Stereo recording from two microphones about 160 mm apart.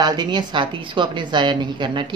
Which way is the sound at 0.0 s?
25° right (ahead or behind).